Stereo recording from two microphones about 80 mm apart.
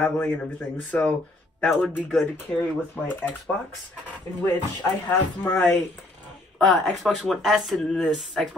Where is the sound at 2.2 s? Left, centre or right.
Centre.